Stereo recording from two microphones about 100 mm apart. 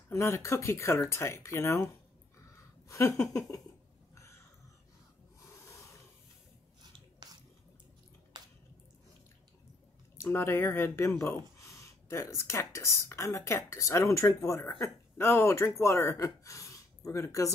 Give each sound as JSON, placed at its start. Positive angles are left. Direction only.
{"t": 0.1, "sound": "speech", "side_deg": 30}
{"t": 2.9, "sound": "speech", "side_deg": 30}
{"t": 4.1, "sound": "a sound", "side_deg": 30}
{"t": 5.5, "sound": "a sound", "side_deg": 30}
{"t": 8.3, "sound": "drip", "side_deg": -45}
{"t": 10.1, "sound": "speech", "side_deg": 25}